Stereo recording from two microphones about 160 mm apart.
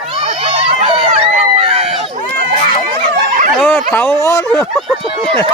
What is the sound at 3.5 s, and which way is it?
Dog, 10° left (ahead or behind).